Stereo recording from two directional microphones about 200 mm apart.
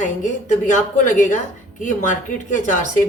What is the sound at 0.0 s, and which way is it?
Speech, 40° left (ahead or behind).